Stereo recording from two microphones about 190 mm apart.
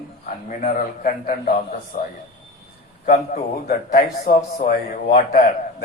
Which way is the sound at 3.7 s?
50° left (ahead or behind).